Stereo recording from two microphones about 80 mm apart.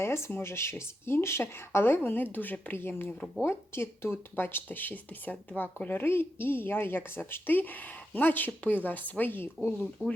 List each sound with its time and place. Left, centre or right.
0.0 s speech: left
3.1 s speech: centre
3.4 s speech: left